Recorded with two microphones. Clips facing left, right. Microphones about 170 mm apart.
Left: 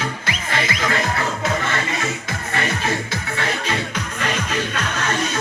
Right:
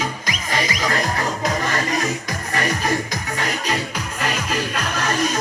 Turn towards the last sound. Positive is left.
turn(degrees=-10)  # may be behind; listen again after turning